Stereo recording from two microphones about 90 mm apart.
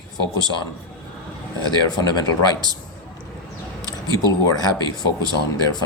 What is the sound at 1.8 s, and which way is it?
Speech, 50° left (ahead or behind).